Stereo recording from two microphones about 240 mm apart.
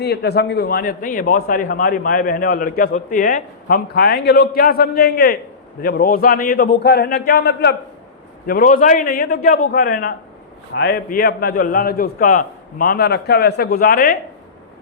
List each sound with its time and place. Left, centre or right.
0.0 s a man's voice: left